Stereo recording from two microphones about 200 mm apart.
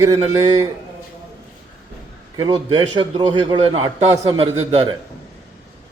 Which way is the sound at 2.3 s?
20° right (ahead or behind).